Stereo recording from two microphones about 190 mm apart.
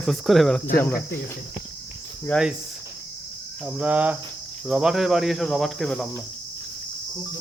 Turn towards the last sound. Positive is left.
turn(degrees=0)  # may be behind; listen again after turning